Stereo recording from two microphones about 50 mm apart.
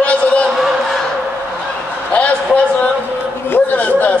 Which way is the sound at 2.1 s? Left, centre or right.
Left.